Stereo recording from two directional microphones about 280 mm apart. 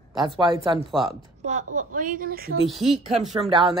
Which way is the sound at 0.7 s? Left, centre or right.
Centre.